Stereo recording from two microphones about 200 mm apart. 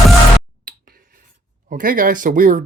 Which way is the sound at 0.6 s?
45° right (ahead or behind).